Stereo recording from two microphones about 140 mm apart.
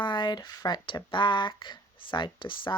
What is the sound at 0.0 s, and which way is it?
Speech, 35° left (ahead or behind).